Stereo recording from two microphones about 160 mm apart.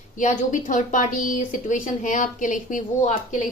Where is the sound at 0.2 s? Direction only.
50° left (ahead or behind).